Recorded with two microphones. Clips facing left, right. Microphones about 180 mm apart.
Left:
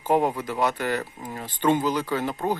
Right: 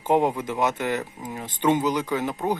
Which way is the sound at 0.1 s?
20° right (ahead or behind).